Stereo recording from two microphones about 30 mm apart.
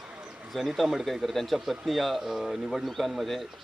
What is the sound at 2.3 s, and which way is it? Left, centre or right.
Speech, centre.